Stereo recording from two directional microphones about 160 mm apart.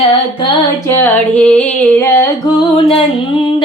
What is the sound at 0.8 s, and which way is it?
Music, 10° left (ahead or behind).